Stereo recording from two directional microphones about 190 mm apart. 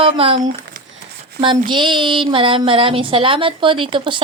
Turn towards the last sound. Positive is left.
turn(degrees=-25)  # may be behind; listen again after turning